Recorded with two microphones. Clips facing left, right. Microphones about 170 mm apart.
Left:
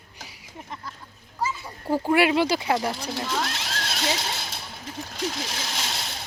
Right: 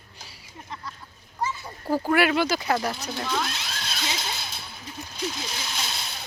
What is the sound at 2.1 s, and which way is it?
Speech, 25° left (ahead or behind).